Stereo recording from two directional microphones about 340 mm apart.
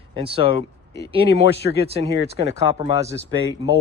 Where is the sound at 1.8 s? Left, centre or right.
Centre.